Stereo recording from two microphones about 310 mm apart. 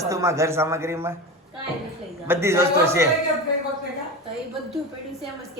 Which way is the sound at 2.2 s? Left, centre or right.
Centre.